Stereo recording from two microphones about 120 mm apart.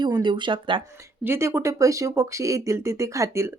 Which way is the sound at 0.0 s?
40° right (ahead or behind).